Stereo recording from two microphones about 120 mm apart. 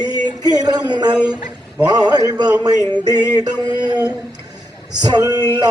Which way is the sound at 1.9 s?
35° right (ahead or behind).